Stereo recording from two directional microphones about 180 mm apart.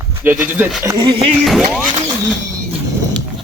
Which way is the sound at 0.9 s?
20° right (ahead or behind).